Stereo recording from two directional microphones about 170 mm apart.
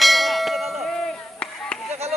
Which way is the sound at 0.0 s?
Centre (ahead or behind).